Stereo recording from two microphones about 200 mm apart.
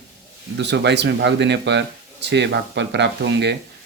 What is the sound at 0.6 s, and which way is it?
Speech, 60° right (ahead or behind).